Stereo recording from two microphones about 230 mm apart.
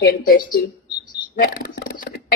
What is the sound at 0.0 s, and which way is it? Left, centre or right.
A woman's voice, left.